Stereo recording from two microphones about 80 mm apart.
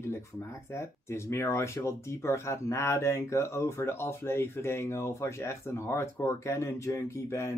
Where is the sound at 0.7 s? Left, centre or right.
Left.